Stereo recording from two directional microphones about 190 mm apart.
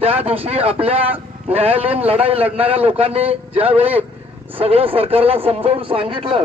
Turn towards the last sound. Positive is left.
turn(degrees=-30)  # may be behind; listen again after turning